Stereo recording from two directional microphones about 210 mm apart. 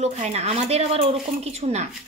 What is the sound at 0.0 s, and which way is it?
Speech, 30° right (ahead or behind).